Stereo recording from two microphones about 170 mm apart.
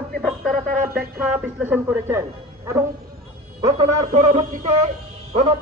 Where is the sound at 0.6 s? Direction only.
60° right (ahead or behind).